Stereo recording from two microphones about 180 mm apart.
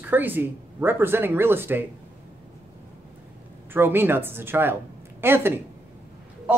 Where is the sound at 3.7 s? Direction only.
10° right (ahead or behind).